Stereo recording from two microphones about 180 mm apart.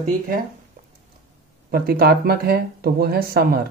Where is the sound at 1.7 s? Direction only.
55° right (ahead or behind).